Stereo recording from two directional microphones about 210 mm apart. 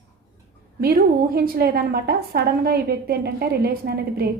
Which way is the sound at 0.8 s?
45° right (ahead or behind).